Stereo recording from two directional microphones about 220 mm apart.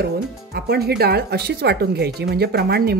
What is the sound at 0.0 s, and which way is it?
Speech, 45° right (ahead or behind).